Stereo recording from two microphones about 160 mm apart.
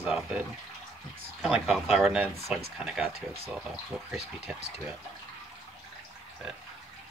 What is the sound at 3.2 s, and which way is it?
Speech, 35° right (ahead or behind).